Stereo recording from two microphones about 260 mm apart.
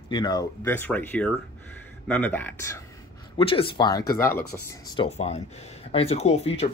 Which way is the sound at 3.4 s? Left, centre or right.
Centre.